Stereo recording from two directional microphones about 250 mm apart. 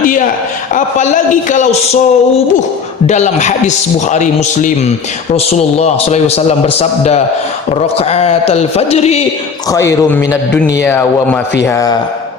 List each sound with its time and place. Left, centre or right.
0.0 s a sound: left
0.7 s a man's voice: left
9.6 s a man's voice: centre